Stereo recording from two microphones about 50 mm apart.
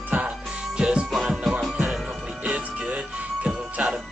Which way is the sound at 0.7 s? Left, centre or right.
Centre.